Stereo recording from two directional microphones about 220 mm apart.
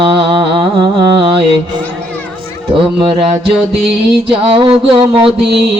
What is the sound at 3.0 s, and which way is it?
Music, 25° right (ahead or behind).